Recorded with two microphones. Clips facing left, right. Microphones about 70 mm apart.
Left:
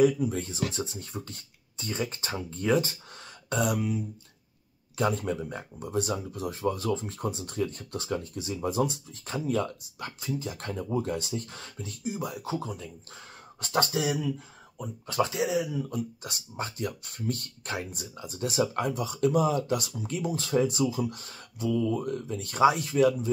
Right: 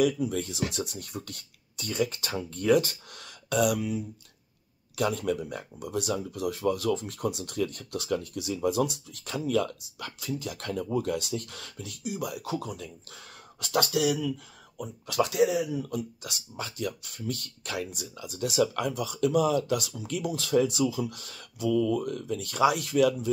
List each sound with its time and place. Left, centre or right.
0.0 s speech: left